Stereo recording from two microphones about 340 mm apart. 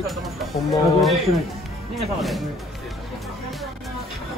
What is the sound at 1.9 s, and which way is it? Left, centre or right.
Speech, centre.